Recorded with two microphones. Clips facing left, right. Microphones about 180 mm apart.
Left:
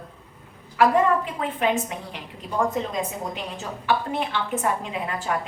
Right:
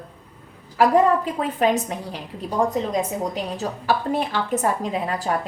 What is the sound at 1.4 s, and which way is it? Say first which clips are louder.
Speech: right 3 dB; 40° right (ahead or behind).